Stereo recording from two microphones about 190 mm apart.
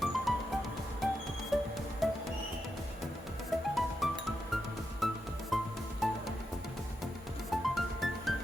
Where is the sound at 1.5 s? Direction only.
Centre (ahead or behind).